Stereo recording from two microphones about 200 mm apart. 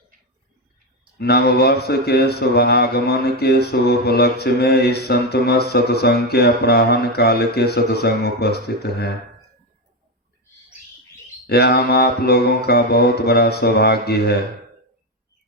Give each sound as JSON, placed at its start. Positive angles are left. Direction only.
{"t": 1.2, "sound": "speech", "side_deg": 50}
{"t": 11.4, "sound": "speech", "side_deg": 55}